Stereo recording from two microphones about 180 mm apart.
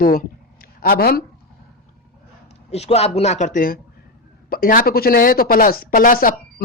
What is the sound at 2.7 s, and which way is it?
A woman's voice, 35° left (ahead or behind).